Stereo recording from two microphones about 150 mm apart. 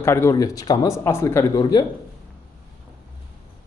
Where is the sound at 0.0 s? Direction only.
15° left (ahead or behind).